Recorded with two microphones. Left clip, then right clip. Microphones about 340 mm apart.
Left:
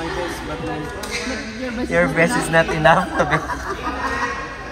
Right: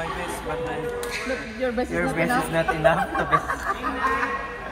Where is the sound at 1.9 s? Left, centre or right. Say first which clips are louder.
Left 11 dB; left.